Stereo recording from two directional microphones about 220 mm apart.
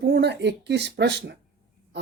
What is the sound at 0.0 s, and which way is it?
Speech, 50° right (ahead or behind).